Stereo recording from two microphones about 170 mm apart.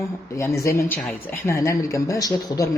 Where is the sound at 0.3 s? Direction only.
15° left (ahead or behind).